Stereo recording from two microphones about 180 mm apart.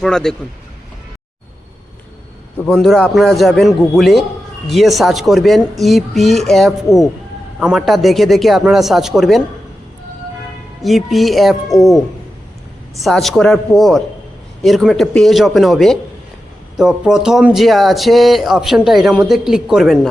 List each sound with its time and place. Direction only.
0.0 s speech: 5° left (ahead or behind)
2.6 s speech: 5° left (ahead or behind)
10.8 s speech: centre (ahead or behind)
11.7 s speech: 20° left (ahead or behind)
13.0 s speech: centre (ahead or behind)